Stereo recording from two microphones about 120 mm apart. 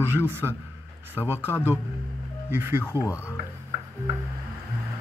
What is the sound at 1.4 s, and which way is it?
Speech, 15° left (ahead or behind).